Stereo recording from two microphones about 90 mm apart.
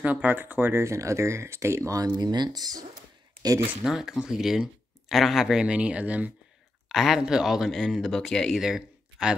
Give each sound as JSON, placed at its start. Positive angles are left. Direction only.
{"t": 0.0, "sound": "speech", "side_deg": -20}
{"t": 2.1, "sound": "speech", "side_deg": -50}
{"t": 3.8, "sound": "speech", "side_deg": -5}
{"t": 6.9, "sound": "speech", "side_deg": -5}
{"t": 8.5, "sound": "a sound", "side_deg": -5}